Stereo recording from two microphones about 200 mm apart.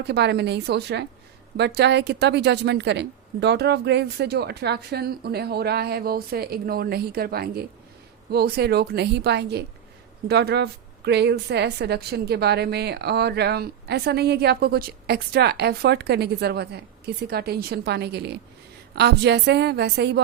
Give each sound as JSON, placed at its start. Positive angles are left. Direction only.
{"t": 0.1, "sound": "a woman's voice", "side_deg": -55}